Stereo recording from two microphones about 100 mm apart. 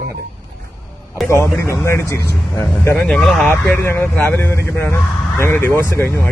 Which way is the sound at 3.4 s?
20° left (ahead or behind).